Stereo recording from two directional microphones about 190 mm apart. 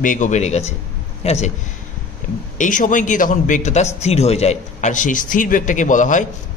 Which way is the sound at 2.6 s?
45° left (ahead or behind).